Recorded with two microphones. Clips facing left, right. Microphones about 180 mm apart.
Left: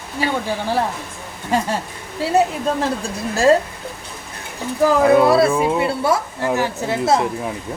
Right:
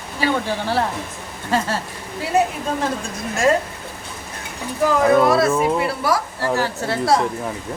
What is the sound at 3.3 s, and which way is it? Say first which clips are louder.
Speech: left 4 dB; 35° left (ahead or behind).